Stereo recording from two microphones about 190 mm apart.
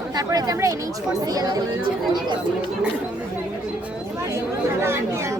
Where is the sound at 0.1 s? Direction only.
20° right (ahead or behind).